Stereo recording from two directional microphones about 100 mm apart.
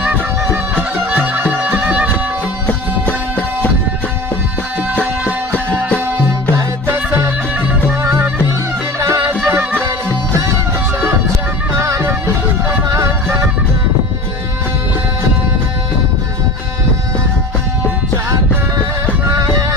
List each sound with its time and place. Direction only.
0.0 s music: 15° right (ahead or behind)
2.6 s music: 15° left (ahead or behind)
6.8 s music: 25° right (ahead or behind)
11.8 s music: 30° right (ahead or behind)
19.3 s music: 30° right (ahead or behind)